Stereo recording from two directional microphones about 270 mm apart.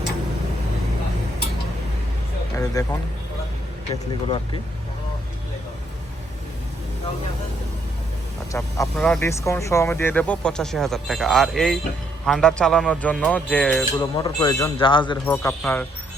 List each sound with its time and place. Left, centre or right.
2.8 s speech: centre
8.5 s speech: centre
15.3 s speech: centre